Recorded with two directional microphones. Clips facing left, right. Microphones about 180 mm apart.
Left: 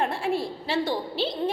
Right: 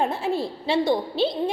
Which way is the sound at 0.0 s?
20° right (ahead or behind).